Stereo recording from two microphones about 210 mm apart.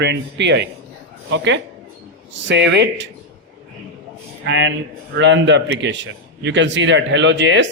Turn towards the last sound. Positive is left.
turn(degrees=-60)  # may be behind; listen again after turning